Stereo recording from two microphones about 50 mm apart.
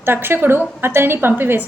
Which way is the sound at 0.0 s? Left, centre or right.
Right.